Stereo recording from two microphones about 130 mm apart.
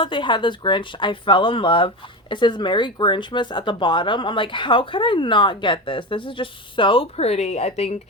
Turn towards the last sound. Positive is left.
turn(degrees=55)  # may be behind; listen again after turning